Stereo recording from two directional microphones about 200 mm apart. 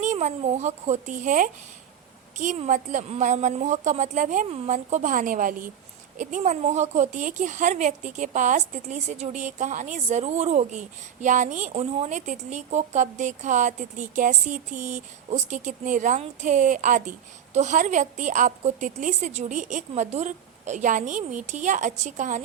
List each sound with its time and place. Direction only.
0.0 s a woman's voice: 35° right (ahead or behind)